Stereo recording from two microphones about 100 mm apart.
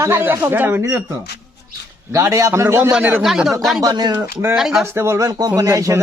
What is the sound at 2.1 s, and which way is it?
Speech, 30° right (ahead or behind).